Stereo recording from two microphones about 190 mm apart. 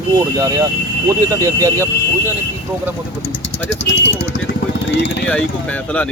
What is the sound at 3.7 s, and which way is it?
Speech, 75° left (ahead or behind).